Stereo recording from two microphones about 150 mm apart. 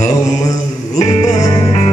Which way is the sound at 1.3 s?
25° left (ahead or behind).